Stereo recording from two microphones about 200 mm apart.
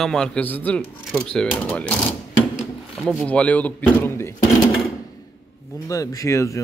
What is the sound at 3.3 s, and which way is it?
A man's voice, 5° left (ahead or behind).